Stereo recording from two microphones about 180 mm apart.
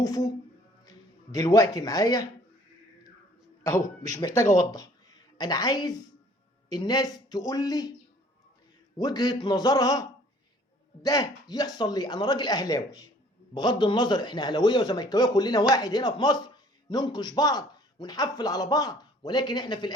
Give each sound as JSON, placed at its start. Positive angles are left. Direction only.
{"t": 0.0, "sound": "a man's voice", "side_deg": 20}
{"t": 3.6, "sound": "a man's voice", "side_deg": 15}
{"t": 9.0, "sound": "a man's voice", "side_deg": 20}